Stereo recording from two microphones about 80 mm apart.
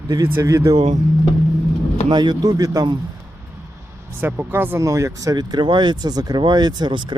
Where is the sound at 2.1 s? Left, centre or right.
Right.